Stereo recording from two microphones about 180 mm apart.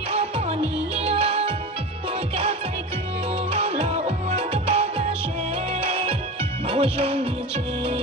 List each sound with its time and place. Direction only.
0.1 s music: 35° right (ahead or behind)
3.5 s music: 35° right (ahead or behind)